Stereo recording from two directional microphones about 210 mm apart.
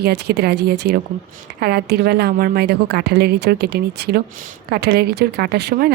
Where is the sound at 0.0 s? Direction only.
50° right (ahead or behind).